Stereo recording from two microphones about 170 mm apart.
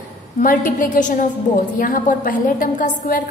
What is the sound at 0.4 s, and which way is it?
A woman's voice, 50° left (ahead or behind).